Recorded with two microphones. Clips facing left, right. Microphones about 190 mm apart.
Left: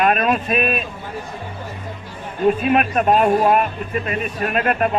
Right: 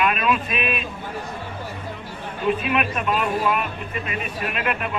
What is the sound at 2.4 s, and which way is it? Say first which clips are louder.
Speech: left 6 dB; 40° left (ahead or behind).